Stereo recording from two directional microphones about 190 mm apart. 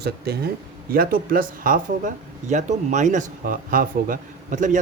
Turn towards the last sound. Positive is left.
turn(degrees=-40)  # may be behind; listen again after turning